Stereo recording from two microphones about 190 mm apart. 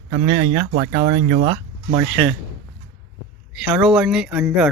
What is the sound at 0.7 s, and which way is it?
Speech, 45° right (ahead or behind).